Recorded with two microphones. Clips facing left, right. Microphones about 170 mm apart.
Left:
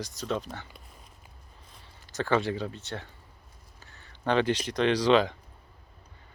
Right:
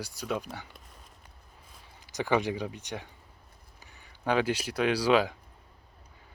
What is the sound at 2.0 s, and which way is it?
Speech, 15° right (ahead or behind).